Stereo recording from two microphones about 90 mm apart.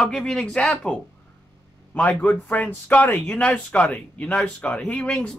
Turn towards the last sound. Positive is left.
turn(degrees=10)  # may be behind; listen again after turning